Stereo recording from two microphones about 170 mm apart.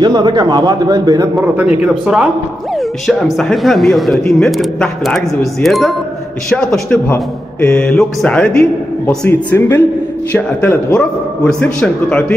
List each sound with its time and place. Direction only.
0.0 s a man's voice: 25° right (ahead or behind)
1.8 s a man's voice: 5° right (ahead or behind)